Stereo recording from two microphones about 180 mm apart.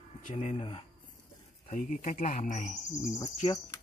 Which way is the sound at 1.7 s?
45° left (ahead or behind).